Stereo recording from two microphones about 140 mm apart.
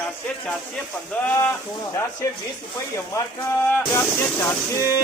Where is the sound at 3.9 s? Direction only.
20° left (ahead or behind).